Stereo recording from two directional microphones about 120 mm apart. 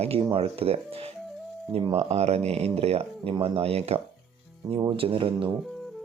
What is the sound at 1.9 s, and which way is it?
Speech, 60° right (ahead or behind).